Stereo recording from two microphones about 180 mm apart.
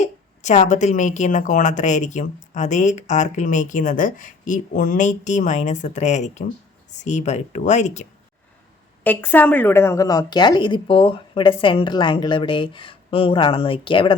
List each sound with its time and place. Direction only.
0.0 s a woman's voice: 40° left (ahead or behind)
9.0 s a woman's voice: 10° left (ahead or behind); by 14.1 s 30° left (ahead or behind)